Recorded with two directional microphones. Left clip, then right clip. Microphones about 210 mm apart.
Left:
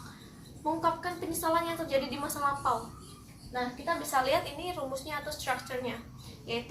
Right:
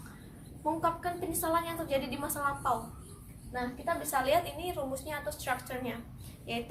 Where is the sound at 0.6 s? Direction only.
10° right (ahead or behind).